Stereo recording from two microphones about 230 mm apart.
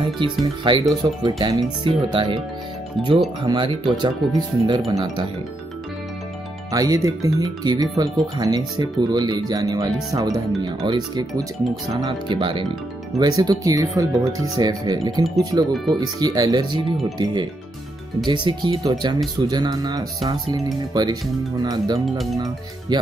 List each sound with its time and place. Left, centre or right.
0.0 s speech: centre
3.4 s speech: centre
6.7 s speech: centre
22.0 s speech: centre